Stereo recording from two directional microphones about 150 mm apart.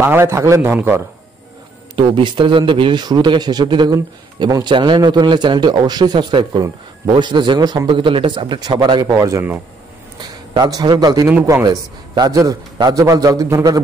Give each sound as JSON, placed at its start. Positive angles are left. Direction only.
{"t": 0.0, "sound": "a man's voice", "side_deg": -15}
{"t": 2.0, "sound": "a man's voice", "side_deg": -35}